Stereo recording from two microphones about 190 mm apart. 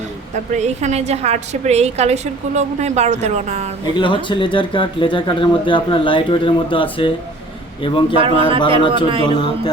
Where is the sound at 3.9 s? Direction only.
25° left (ahead or behind).